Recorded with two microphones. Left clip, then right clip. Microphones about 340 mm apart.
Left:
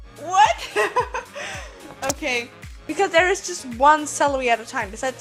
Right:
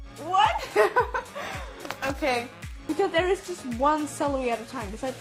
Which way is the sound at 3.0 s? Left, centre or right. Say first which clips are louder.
Left 7 dB; left.